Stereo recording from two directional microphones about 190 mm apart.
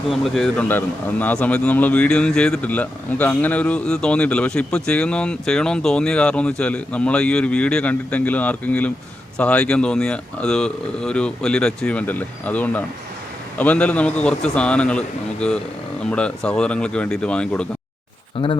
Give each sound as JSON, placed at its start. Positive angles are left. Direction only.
{"t": 0.1, "sound": "speech", "side_deg": 0}